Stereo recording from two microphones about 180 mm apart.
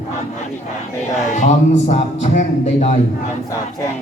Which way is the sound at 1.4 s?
40° left (ahead or behind).